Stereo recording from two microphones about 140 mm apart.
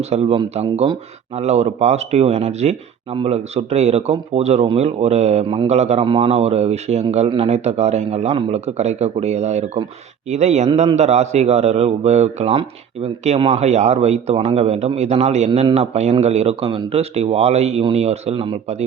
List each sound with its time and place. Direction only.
0.0 s a man's voice: 50° right (ahead or behind)